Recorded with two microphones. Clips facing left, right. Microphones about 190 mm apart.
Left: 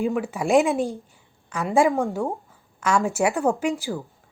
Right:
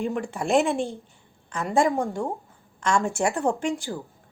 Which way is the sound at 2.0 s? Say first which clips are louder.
Left 2 dB; 15° left (ahead or behind).